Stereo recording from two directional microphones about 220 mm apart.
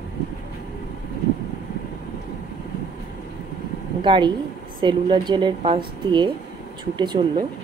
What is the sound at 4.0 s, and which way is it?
A woman's voice, 20° right (ahead or behind).